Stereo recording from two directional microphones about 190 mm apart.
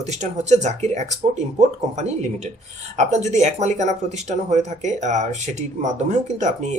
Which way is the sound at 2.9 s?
35° right (ahead or behind).